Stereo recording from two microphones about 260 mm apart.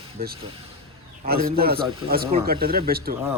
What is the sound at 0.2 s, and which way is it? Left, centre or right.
Speech, right.